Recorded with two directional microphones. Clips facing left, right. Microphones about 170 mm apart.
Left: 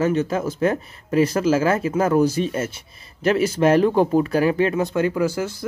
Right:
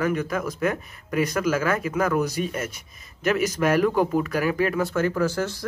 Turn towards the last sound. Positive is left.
turn(degrees=10)  # may be behind; listen again after turning